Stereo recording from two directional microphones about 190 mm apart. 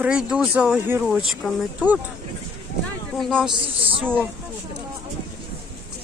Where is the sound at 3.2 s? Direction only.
Centre (ahead or behind).